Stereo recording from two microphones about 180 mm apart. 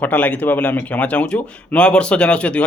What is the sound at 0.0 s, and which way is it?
Speech, 10° left (ahead or behind).